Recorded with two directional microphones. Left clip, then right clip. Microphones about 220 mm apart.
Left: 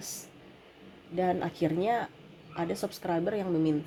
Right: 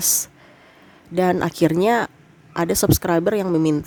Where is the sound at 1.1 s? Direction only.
35° right (ahead or behind).